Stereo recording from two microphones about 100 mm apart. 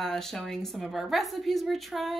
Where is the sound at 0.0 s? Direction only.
5° left (ahead or behind).